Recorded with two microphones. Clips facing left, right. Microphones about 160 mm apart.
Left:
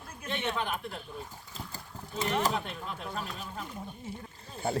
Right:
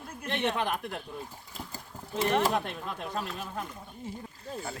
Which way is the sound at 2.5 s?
70° right (ahead or behind).